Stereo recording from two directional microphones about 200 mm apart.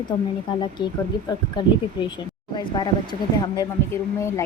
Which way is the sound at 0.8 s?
20° left (ahead or behind).